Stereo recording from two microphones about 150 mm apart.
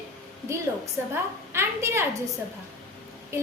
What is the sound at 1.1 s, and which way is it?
A woman's voice, 15° right (ahead or behind).